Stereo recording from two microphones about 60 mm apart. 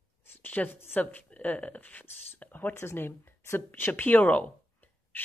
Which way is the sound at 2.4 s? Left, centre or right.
Left.